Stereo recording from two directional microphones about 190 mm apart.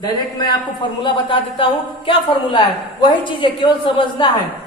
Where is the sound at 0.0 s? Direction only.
25° left (ahead or behind).